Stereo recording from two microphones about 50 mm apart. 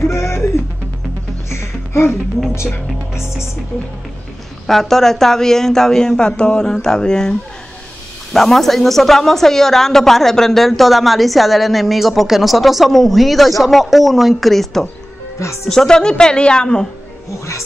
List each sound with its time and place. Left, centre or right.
0.0 s music: left
1.5 s music: left
4.6 s speech: centre